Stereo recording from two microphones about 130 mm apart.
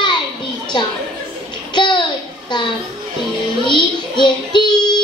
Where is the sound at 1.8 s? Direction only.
35° left (ahead or behind).